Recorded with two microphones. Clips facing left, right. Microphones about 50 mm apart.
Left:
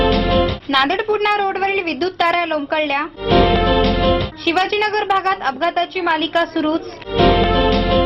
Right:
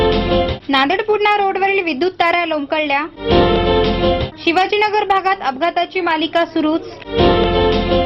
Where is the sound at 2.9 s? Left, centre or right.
Centre.